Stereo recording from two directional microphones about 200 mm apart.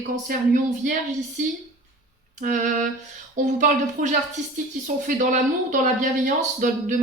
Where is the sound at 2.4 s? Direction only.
40° right (ahead or behind).